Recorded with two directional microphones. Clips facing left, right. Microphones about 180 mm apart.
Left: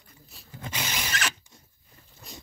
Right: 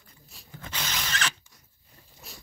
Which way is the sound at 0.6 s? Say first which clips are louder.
Left 2 dB; 15° left (ahead or behind).